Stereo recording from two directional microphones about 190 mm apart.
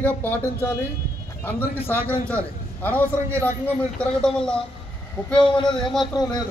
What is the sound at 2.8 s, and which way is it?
A man's voice, 10° left (ahead or behind).